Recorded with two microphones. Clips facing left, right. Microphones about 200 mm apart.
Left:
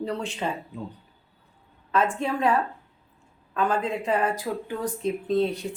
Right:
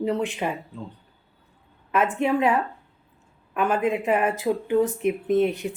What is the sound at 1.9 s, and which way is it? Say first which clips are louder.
Speech: right 3 dB; 10° right (ahead or behind).